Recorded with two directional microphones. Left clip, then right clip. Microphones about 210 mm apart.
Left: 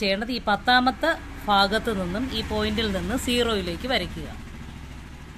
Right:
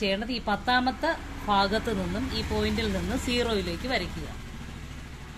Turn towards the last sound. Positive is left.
turn(degrees=20)  # may be behind; listen again after turning